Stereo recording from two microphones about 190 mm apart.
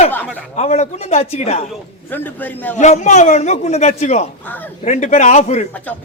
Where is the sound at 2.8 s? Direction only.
40° left (ahead or behind).